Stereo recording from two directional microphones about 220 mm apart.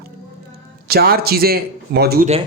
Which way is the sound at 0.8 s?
45° right (ahead or behind).